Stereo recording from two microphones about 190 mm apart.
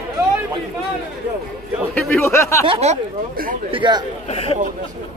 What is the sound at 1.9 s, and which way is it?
Speech, 15° left (ahead or behind).